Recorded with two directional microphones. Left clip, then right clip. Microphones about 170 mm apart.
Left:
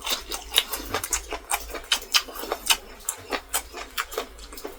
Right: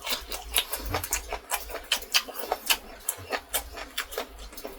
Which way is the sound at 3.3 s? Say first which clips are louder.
Left 2 dB; 25° left (ahead or behind).